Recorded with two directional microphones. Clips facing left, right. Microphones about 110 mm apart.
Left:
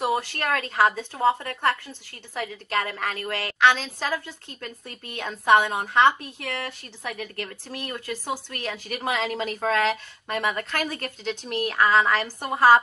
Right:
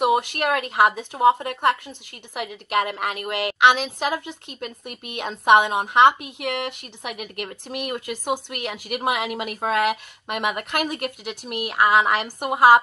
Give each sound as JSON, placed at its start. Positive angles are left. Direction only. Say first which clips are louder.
{"t": 0.0, "sound": "speech", "louder": "right 5 dB", "side_deg": -20}